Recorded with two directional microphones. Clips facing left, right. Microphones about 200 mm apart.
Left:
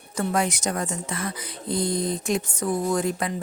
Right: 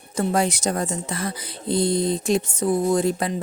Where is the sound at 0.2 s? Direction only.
30° right (ahead or behind).